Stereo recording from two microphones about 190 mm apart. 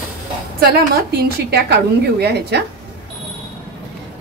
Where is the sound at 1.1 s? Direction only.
55° right (ahead or behind).